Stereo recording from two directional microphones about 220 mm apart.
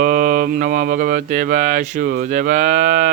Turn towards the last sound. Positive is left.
turn(degrees=-40)  # may be behind; listen again after turning